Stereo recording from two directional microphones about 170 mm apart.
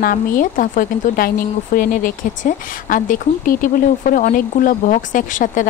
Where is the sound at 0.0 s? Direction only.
55° left (ahead or behind).